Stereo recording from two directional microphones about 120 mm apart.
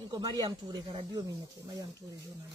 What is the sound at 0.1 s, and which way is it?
Speech, 35° right (ahead or behind).